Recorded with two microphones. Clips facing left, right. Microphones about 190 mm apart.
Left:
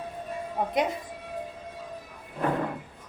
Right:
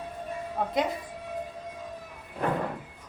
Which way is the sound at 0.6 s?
20° left (ahead or behind).